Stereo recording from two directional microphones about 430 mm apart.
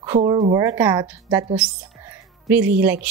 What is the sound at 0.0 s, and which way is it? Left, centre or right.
A woman's voice, centre.